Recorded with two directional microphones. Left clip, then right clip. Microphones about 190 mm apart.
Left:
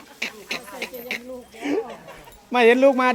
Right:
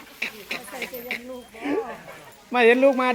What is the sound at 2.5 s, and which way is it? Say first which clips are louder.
Speech: left 2 dB; 15° left (ahead or behind).